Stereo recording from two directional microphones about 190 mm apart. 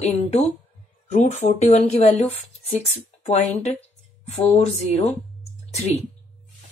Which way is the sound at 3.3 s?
40° left (ahead or behind).